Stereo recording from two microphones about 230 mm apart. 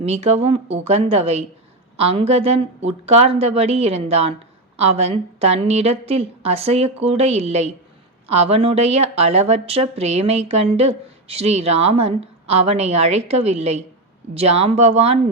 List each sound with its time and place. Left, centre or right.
0.0 s a woman's voice: right